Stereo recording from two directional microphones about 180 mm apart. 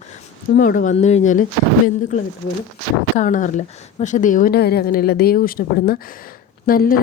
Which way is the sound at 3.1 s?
45° left (ahead or behind).